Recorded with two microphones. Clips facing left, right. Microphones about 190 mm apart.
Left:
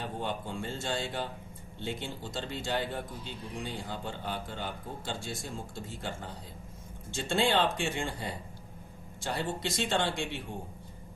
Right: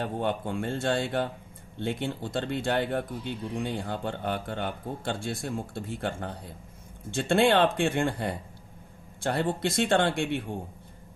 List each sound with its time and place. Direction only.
0.0 s speech: 60° right (ahead or behind)